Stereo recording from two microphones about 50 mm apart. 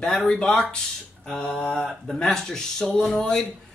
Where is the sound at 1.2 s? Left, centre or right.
Centre.